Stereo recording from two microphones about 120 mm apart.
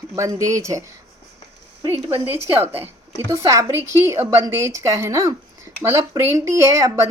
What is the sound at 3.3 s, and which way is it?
A woman's voice, 25° right (ahead or behind).